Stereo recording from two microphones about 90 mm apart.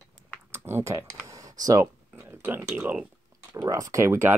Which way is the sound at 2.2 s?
25° right (ahead or behind).